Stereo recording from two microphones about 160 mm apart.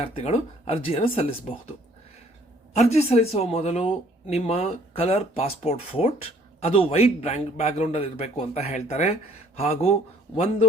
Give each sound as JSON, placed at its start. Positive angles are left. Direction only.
{"t": 0.2, "sound": "speech", "side_deg": 35}
{"t": 2.7, "sound": "speech", "side_deg": 40}